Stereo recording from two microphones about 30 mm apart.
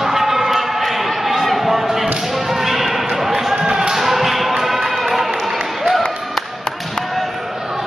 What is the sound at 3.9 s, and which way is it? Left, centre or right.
Basketball bounce, centre.